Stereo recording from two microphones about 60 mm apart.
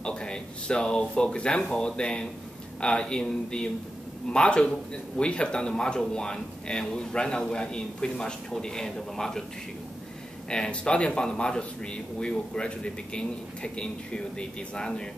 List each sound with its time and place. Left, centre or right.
0.0 s a sound: centre
1.7 s a man's voice: centre
10.5 s a man's voice: centre